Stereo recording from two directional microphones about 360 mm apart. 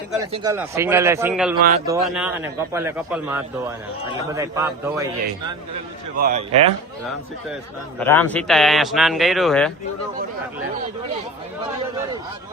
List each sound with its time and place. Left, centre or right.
0.1 s a man's voice: centre
6.1 s a man's voice: right
7.9 s speech: centre